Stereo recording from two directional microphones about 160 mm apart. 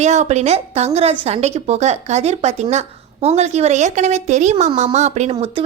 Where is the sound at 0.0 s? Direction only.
45° right (ahead or behind).